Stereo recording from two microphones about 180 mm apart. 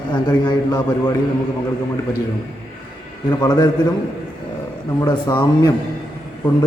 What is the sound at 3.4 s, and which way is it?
Speech, 20° left (ahead or behind).